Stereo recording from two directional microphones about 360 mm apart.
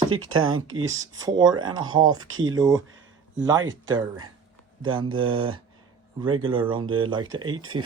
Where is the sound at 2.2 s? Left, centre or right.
Right.